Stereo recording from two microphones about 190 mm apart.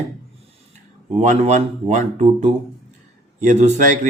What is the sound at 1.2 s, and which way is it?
Speech, 35° right (ahead or behind).